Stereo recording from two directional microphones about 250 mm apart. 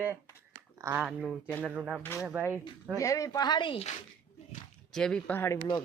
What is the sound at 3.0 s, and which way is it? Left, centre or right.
Speech, centre.